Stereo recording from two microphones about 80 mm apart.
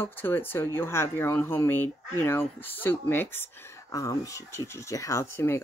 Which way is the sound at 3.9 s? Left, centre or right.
Left.